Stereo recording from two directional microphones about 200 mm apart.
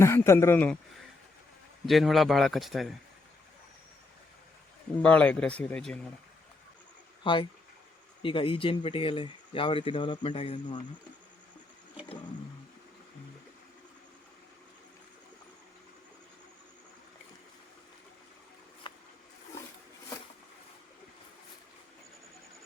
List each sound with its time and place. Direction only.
0.0 s speech: 10° left (ahead or behind)
1.9 s speech: centre (ahead or behind)
5.0 s speech: 5° left (ahead or behind)
7.3 s speech: 25° left (ahead or behind)
18.8 s a sound: 25° left (ahead or behind)